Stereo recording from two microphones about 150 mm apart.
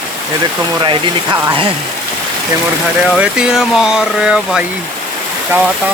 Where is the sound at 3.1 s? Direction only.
5° right (ahead or behind).